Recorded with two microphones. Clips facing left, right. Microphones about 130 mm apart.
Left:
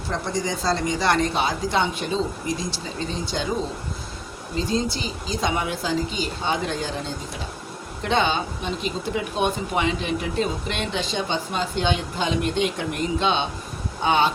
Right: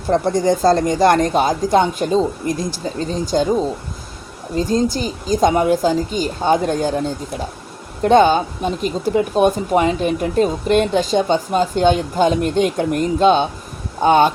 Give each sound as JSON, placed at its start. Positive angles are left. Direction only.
{"t": 0.1, "sound": "speech", "side_deg": -50}
{"t": 4.5, "sound": "speech", "side_deg": -45}
{"t": 8.0, "sound": "speech", "side_deg": -45}